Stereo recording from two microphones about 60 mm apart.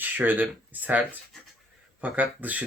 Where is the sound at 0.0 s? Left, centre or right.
Right.